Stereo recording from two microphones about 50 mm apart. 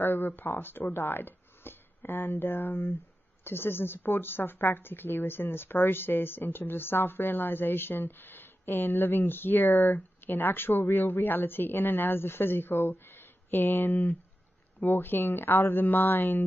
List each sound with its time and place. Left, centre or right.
0.0 s a woman's voice: left